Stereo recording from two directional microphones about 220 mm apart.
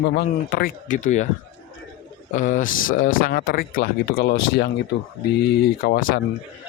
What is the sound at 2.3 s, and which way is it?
Speech, 35° left (ahead or behind).